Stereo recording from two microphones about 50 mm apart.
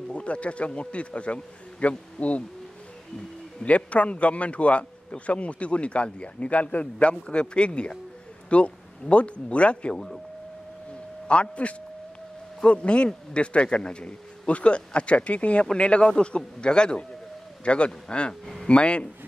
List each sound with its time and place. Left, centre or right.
0.1 s a man's voice: left
3.6 s a man's voice: left
9.9 s speech: centre
11.2 s a man's voice: left